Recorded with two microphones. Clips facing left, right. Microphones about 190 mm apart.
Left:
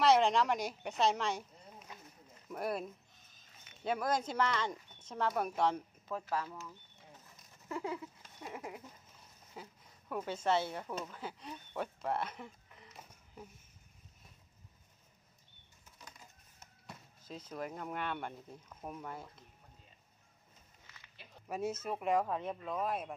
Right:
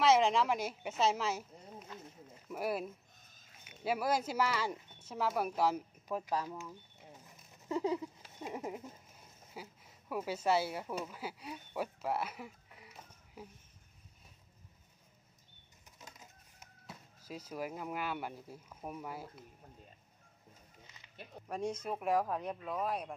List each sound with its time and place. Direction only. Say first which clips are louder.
0.0 s speech: even; centre (ahead or behind)
2.5 s speech: right 1 dB; 5° right (ahead or behind)
5.6 s bird: right 1 dB; 10° right (ahead or behind)
9.5 s speech: right 1 dB; 5° right (ahead or behind)
16.0 s chicken: right 1 dB; 20° right (ahead or behind)
16.8 s speech: right 1 dB; 10° right (ahead or behind)
20.8 s a sound: right 2 dB; 20° right (ahead or behind)
21.5 s speech: even; 5° left (ahead or behind)